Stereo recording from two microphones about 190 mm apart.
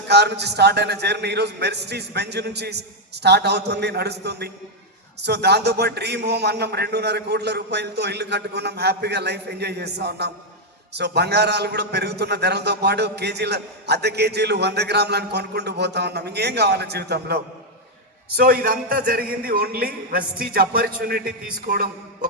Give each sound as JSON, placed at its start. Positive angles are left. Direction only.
{"t": 0.1, "sound": "a man's voice", "side_deg": -60}